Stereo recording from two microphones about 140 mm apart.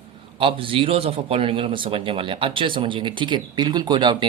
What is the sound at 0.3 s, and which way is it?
Speech, 40° right (ahead or behind).